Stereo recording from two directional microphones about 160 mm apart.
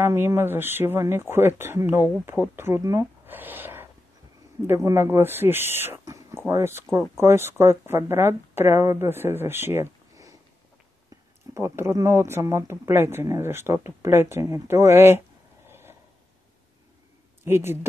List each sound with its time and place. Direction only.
0.0 s speech: 15° right (ahead or behind)
11.5 s speech: 15° right (ahead or behind)
17.5 s speech: 15° right (ahead or behind)